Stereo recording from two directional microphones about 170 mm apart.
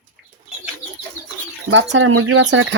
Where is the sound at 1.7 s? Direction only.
90° right.